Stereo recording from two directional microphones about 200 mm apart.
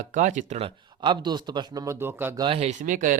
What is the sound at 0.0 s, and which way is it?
Speech, 40° right (ahead or behind).